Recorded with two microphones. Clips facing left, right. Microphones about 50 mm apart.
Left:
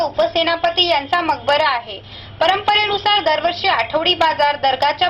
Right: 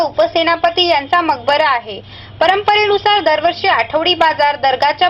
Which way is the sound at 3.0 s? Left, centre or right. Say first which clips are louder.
Right 4 dB; right.